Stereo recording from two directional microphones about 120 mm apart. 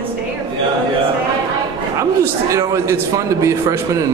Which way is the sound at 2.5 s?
25° right (ahead or behind).